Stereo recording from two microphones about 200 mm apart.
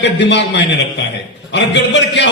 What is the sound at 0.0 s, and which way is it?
Speech, 60° left (ahead or behind).